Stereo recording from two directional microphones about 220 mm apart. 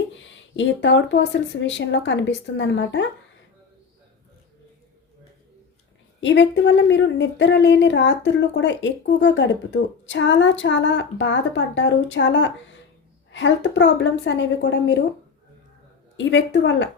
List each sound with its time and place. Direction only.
0.2 s speech: 55° left (ahead or behind)
6.1 s speech: 55° left (ahead or behind)
16.1 s speech: 55° left (ahead or behind)